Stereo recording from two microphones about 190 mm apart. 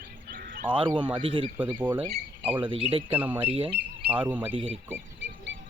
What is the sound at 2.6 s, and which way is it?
Speech, 25° right (ahead or behind).